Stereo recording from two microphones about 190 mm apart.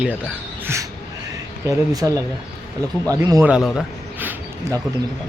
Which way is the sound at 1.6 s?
20° right (ahead or behind).